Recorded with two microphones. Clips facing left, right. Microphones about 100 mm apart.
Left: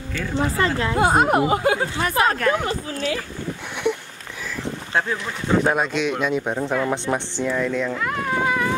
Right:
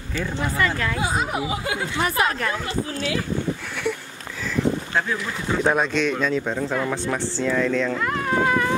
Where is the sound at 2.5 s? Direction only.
60° left (ahead or behind).